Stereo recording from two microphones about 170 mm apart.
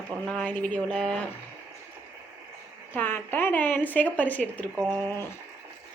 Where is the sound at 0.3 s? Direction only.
5° left (ahead or behind).